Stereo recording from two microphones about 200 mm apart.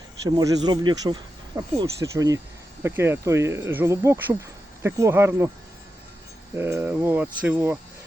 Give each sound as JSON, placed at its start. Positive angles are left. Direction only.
{"t": 0.3, "sound": "speech", "side_deg": -20}
{"t": 6.6, "sound": "speech", "side_deg": -10}